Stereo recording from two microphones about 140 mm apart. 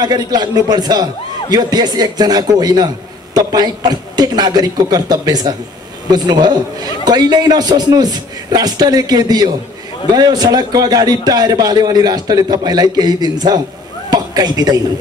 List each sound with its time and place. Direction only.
0.0 s a man's voice: 30° right (ahead or behind)